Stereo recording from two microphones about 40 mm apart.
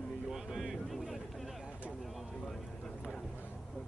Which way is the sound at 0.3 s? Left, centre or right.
Centre.